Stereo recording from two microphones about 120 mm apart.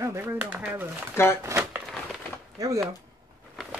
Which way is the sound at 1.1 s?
20° left (ahead or behind).